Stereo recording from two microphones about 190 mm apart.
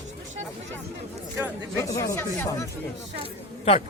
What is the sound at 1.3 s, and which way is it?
Speech, 15° right (ahead or behind).